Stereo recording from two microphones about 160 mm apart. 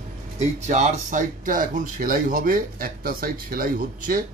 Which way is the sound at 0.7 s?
50° right (ahead or behind).